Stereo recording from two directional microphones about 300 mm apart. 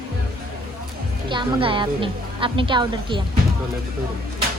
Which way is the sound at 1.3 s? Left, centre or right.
Centre.